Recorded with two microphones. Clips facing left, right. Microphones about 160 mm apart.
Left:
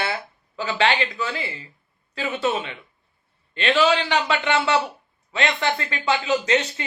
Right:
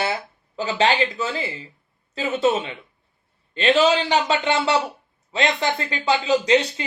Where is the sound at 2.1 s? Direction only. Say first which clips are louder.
Right 4 dB; 40° right (ahead or behind).